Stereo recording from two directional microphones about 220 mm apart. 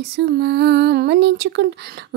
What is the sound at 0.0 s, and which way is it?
Speech, 50° right (ahead or behind).